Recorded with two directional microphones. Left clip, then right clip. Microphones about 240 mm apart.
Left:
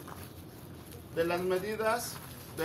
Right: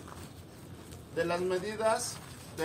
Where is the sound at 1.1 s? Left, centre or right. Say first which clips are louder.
Left 1 dB; centre.